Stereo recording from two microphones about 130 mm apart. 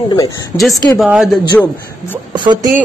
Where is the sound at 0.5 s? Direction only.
15° left (ahead or behind).